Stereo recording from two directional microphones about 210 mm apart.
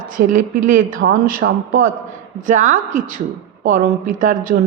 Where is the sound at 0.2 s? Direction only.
45° right (ahead or behind).